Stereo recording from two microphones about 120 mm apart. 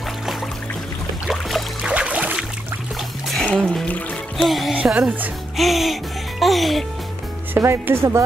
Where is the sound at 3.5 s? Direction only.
5° left (ahead or behind).